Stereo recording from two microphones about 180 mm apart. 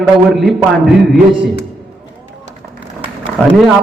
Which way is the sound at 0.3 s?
Centre (ahead or behind).